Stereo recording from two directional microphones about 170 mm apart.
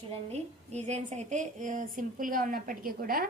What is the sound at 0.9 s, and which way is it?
A woman's voice, 45° right (ahead or behind).